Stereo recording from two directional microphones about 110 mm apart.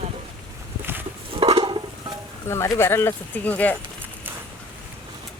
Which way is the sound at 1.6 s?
40° right (ahead or behind).